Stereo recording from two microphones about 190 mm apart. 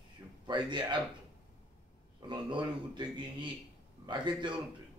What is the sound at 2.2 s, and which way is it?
A man's voice, 25° right (ahead or behind).